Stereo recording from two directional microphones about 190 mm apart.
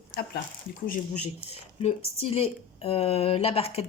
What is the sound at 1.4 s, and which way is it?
Speech, 30° left (ahead or behind).